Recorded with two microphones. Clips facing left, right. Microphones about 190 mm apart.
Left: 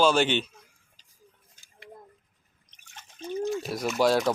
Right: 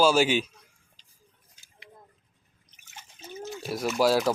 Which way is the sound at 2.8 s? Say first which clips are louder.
Left 8 dB; 5° right (ahead or behind).